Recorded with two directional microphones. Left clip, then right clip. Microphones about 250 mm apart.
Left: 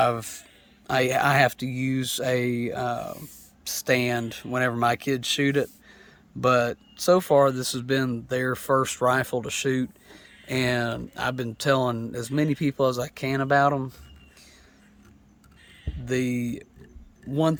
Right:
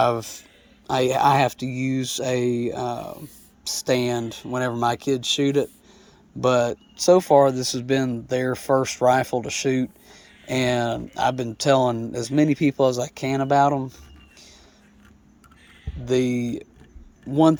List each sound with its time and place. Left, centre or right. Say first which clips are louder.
0.0 s speech: right 2 dB; centre
16.0 s speech: right 5 dB; centre